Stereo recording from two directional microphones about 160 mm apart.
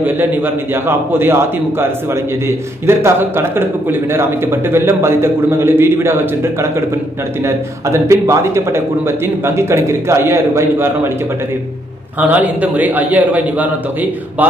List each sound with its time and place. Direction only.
0.0 s a man's voice: 10° right (ahead or behind)
12.2 s a man's voice: 10° right (ahead or behind)